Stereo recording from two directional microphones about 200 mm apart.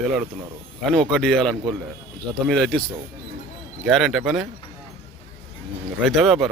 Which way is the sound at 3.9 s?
Centre (ahead or behind).